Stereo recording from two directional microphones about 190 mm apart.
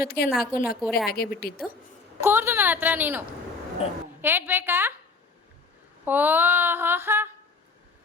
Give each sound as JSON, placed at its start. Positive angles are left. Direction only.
{"t": 0.0, "sound": "a woman's voice", "side_deg": 55}
{"t": 0.8, "sound": "a woman's voice", "side_deg": 0}
{"t": 1.1, "sound": "a woman's voice", "side_deg": 50}
{"t": 2.2, "sound": "female singing", "side_deg": -10}
{"t": 3.8, "sound": "a woman's voice", "side_deg": 30}
{"t": 4.2, "sound": "female singing", "side_deg": -10}
{"t": 6.1, "sound": "female singing", "side_deg": -10}